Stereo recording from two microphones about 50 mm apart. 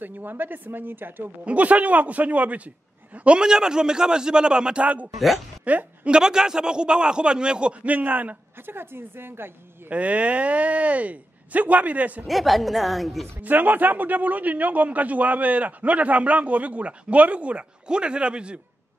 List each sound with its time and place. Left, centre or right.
0.0 s a man's voice: right
1.4 s speech: right
3.3 s a man's voice: centre
4.8 s a woman's voice: right
6.1 s a man's voice: centre
7.8 s speech: right
9.8 s speech: right
12.3 s a woman's voice: centre
13.4 s a man's voice: right